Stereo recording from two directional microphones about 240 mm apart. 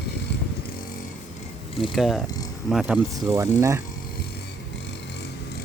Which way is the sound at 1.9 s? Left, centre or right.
Centre.